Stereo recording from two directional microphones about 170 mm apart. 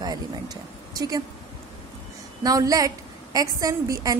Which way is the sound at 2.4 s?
20° right (ahead or behind).